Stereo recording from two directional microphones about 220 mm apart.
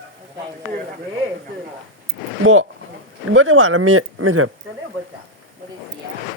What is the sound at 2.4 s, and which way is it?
Speech, 65° right (ahead or behind).